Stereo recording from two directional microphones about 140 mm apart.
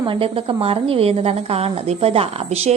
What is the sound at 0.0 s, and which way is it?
A woman's voice, 40° right (ahead or behind).